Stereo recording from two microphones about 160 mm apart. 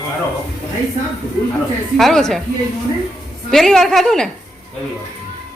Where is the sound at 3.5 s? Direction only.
Centre (ahead or behind).